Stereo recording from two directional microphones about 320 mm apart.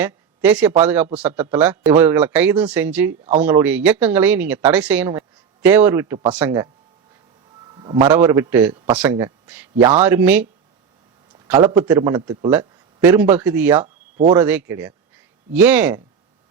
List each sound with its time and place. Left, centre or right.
0.0 s a man's voice: centre
7.7 s a man's voice: centre
11.4 s a man's voice: centre
13.8 s a sound: right
14.3 s speech: centre